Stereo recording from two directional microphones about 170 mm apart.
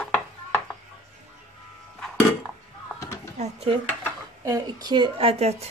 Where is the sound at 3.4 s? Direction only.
35° right (ahead or behind).